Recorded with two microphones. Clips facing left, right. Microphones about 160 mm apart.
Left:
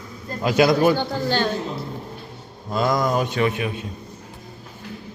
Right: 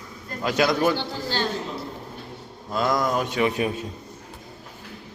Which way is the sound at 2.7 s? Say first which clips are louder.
Left 2 dB; centre (ahead or behind).